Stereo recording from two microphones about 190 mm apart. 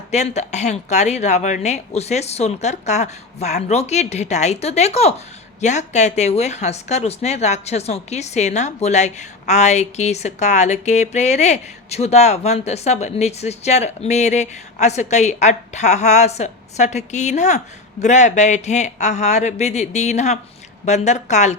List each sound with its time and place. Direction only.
0.1 s speech: 35° left (ahead or behind)